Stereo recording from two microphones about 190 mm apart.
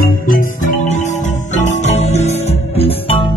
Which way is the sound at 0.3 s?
45° left (ahead or behind).